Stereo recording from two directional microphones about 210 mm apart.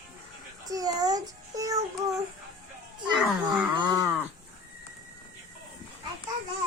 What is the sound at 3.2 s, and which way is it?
Speech, centre (ahead or behind).